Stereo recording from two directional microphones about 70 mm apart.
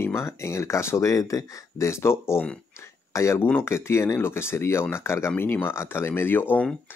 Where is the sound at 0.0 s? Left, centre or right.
Left.